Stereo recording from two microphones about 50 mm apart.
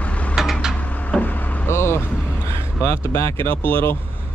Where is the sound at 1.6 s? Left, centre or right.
Left.